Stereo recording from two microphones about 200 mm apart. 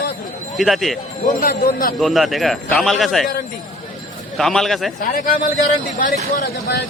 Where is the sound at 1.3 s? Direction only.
45° left (ahead or behind).